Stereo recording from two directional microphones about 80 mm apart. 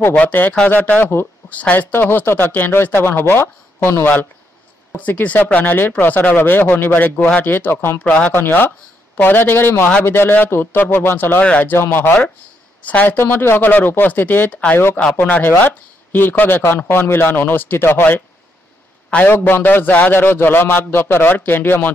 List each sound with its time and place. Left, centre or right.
0.1 s speech: left